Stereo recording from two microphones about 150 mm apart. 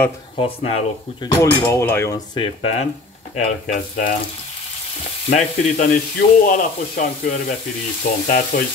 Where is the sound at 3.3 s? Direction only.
50° left (ahead or behind).